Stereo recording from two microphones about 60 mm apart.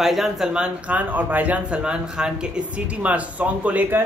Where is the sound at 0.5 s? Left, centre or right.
Centre.